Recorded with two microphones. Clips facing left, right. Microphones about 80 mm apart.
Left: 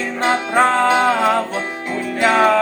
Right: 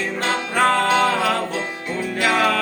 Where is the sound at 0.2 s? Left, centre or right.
Left.